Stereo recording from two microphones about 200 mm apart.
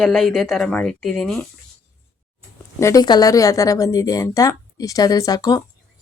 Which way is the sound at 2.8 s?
20° left (ahead or behind).